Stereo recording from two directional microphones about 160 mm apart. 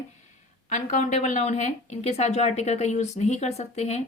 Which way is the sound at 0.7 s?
50° left (ahead or behind).